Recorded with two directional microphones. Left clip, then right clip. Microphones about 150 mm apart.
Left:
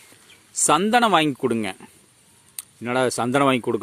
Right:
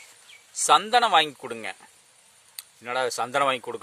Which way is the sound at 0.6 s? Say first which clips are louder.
Left 1 dB; 40° left (ahead or behind).